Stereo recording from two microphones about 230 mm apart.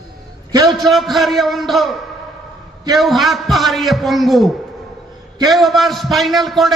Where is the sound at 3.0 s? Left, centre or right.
Centre.